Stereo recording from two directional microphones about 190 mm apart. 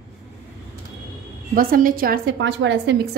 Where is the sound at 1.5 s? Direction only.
50° right (ahead or behind); by 2.9 s 70° right (ahead or behind).